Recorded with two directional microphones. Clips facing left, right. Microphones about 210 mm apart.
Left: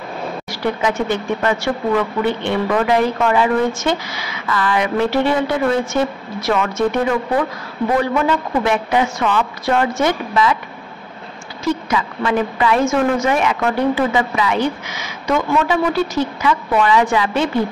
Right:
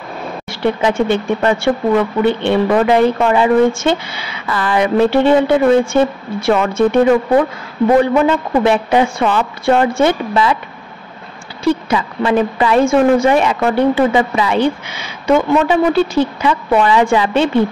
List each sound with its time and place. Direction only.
0.5 s a woman's voice: 25° right (ahead or behind)
8.0 s a woman's voice: 25° right (ahead or behind)
11.6 s a woman's voice: 30° right (ahead or behind)